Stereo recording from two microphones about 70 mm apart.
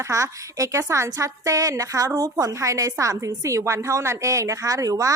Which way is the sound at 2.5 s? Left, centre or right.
Right.